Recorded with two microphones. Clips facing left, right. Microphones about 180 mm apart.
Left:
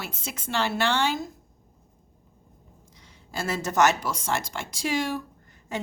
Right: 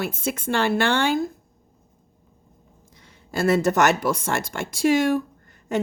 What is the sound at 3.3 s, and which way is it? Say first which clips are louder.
A woman's voice: right 10 dB; 60° right (ahead or behind).